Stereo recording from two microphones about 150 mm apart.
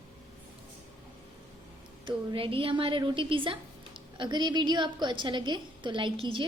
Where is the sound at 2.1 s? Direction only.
35° right (ahead or behind).